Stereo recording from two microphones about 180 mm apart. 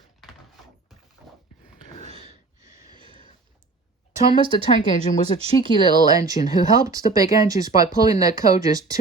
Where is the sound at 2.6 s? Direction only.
15° right (ahead or behind).